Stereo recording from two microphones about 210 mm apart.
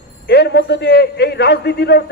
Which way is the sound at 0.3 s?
50° left (ahead or behind).